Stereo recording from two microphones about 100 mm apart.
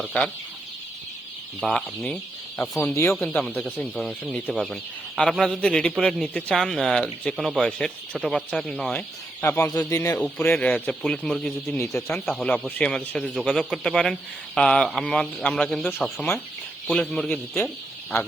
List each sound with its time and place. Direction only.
1.6 s a man's voice: 5° left (ahead or behind)
2.8 s speech: 25° left (ahead or behind)
3.2 s a man's voice: 5° left (ahead or behind)
9.4 s speech: 25° left (ahead or behind)
10.2 s speech: 15° left (ahead or behind)
11.0 s a man's voice: 5° left (ahead or behind)
16.8 s speech: 10° left (ahead or behind)